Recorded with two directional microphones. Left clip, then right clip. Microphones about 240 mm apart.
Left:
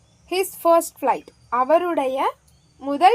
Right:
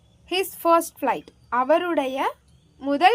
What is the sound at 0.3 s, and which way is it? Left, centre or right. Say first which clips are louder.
A woman's voice: left 2 dB; right.